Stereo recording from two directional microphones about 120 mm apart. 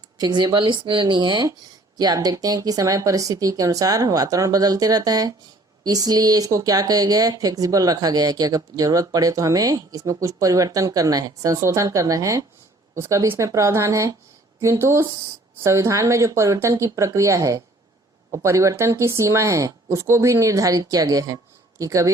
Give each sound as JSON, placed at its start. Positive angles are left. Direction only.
{"t": 0.2, "sound": "speech", "side_deg": -35}